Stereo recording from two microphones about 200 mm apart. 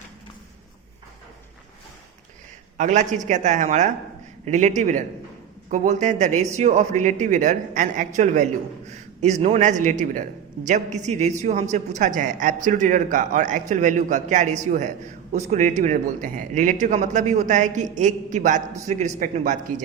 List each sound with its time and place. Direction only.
2.7 s a man's voice: 35° right (ahead or behind)